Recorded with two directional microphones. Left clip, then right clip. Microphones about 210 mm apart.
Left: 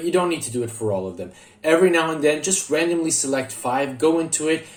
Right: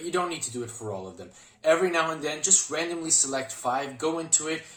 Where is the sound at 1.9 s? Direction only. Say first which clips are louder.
Left 8 dB; centre (ahead or behind).